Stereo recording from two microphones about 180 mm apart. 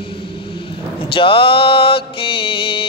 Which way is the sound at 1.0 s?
30° left (ahead or behind).